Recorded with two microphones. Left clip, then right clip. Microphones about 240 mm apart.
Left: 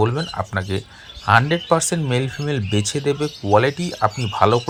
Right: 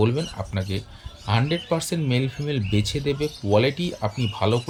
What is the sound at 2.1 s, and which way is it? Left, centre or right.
Speech, centre.